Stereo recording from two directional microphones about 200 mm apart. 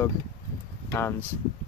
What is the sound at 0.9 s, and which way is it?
Speech, 10° left (ahead or behind).